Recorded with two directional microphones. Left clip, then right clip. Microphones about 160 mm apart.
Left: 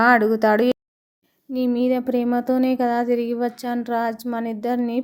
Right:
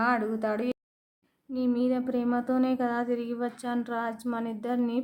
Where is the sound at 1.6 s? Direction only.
25° left (ahead or behind).